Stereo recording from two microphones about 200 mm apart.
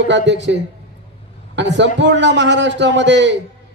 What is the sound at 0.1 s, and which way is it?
Speech, 65° right (ahead or behind).